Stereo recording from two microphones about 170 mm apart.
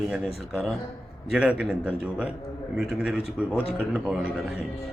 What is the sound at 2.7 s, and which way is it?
Speech, 5° right (ahead or behind).